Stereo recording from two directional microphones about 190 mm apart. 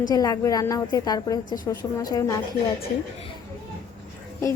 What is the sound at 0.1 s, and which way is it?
A woman's voice, 20° left (ahead or behind).